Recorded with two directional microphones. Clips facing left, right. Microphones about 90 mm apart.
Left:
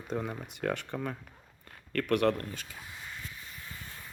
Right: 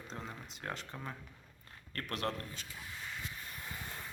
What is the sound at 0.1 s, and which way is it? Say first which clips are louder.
Speech: left 12 dB; 60° left (ahead or behind).